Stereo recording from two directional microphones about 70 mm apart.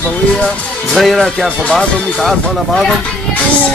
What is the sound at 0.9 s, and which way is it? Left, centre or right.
Speech, centre.